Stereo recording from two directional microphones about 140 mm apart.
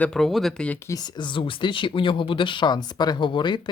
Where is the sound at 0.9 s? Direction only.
30° left (ahead or behind).